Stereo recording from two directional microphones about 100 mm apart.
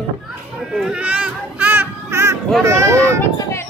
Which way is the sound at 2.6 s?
30° right (ahead or behind).